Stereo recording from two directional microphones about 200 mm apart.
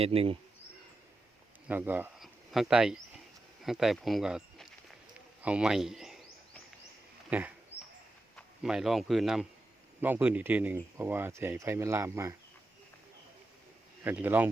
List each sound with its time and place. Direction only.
0.0 s speech: 30° right (ahead or behind)
1.6 s a man's voice: 10° right (ahead or behind)
7.3 s a man's voice: 5° right (ahead or behind)
14.0 s speech: 10° right (ahead or behind)